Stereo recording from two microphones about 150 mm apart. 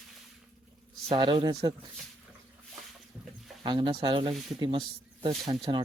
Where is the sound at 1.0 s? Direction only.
35° right (ahead or behind).